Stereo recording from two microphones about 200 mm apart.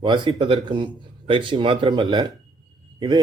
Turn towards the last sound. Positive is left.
turn(degrees=-20)  # may be behind; listen again after turning